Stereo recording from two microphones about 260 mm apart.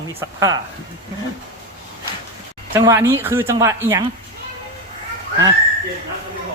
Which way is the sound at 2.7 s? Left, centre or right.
Centre.